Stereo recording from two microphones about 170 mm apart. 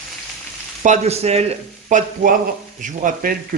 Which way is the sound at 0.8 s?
45° right (ahead or behind).